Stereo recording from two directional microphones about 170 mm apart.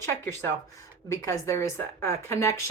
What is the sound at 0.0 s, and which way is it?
A woman's voice, 15° left (ahead or behind).